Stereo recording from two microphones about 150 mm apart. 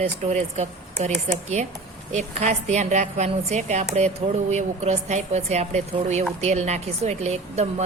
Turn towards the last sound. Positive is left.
turn(degrees=-45)  # may be behind; listen again after turning